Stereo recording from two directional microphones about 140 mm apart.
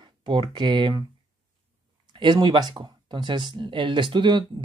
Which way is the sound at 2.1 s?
30° right (ahead or behind).